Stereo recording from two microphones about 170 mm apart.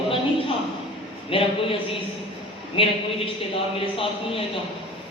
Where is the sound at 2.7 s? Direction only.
35° left (ahead or behind).